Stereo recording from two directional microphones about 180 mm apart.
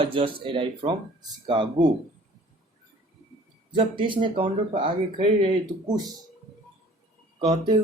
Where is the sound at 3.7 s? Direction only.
25° right (ahead or behind).